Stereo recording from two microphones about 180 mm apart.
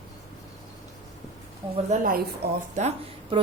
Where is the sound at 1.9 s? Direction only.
40° right (ahead or behind).